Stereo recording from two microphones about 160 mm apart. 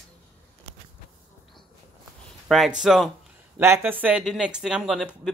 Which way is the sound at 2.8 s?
Centre (ahead or behind).